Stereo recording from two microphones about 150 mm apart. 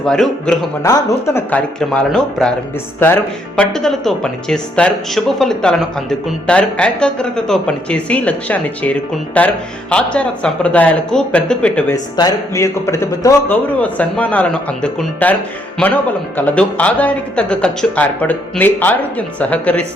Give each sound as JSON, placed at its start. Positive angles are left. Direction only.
{"t": 0.0, "sound": "speech", "side_deg": 5}
{"t": 0.8, "sound": "speech", "side_deg": 25}
{"t": 12.1, "sound": "a man's voice", "side_deg": 20}
{"t": 16.5, "sound": "speech", "side_deg": 10}